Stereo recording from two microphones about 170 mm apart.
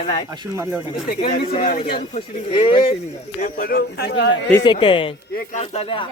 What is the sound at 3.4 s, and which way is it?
Speech, 55° left (ahead or behind).